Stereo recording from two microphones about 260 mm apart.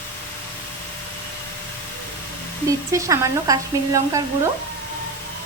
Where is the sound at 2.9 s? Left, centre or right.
Centre.